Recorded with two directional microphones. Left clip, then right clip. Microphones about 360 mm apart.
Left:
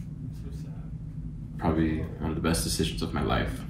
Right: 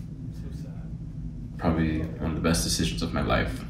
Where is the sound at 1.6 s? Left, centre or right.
Centre.